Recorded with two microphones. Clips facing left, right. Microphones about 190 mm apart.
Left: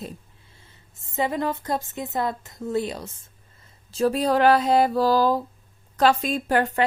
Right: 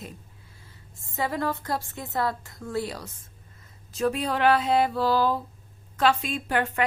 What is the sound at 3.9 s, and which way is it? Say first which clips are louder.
A woman's voice: left 5 dB; 35° left (ahead or behind).